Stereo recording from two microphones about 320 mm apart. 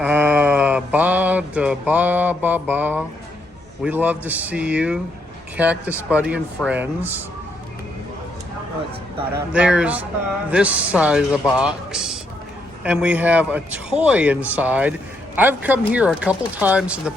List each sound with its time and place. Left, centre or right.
0.0 s mantra: centre
3.8 s a man's voice: centre
9.5 s a man's voice: centre